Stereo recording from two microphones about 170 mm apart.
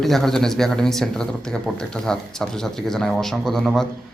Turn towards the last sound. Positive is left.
turn(degrees=0)  # may be behind; listen again after turning